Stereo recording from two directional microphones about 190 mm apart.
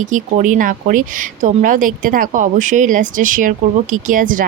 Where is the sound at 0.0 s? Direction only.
40° right (ahead or behind).